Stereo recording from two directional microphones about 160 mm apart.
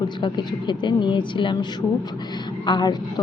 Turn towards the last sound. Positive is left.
turn(degrees=25)  # may be behind; listen again after turning